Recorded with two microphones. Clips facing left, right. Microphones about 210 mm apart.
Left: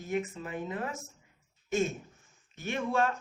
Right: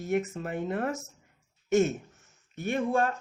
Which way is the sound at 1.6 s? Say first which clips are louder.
Right 6 dB; 70° right (ahead or behind).